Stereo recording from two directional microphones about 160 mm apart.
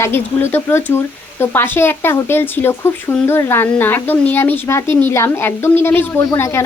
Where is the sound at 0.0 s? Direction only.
15° left (ahead or behind).